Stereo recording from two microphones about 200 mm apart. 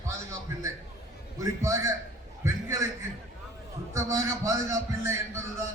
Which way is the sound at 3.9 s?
15° right (ahead or behind).